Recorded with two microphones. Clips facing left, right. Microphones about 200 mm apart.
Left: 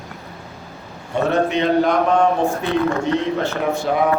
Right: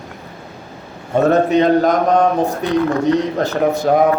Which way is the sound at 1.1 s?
40° right (ahead or behind).